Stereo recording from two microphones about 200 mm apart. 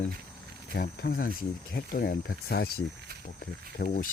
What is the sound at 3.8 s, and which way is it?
Speech, 50° left (ahead or behind).